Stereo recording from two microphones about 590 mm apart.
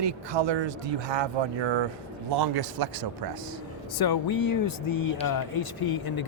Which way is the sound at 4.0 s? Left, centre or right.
Left.